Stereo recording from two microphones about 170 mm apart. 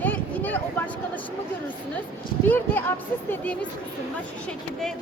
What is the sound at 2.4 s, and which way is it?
Speech, 10° left (ahead or behind).